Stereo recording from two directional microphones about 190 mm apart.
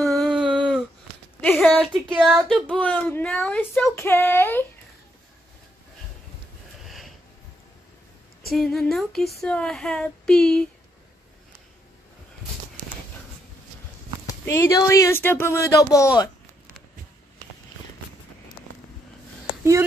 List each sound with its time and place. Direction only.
0.0 s a sound: centre (ahead or behind)
2.1 s a child's voice: centre (ahead or behind)
8.5 s speech: centre (ahead or behind)
14.2 s a child's voice: 15° left (ahead or behind)